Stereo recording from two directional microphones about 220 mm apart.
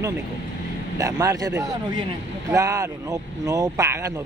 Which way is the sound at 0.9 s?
15° right (ahead or behind).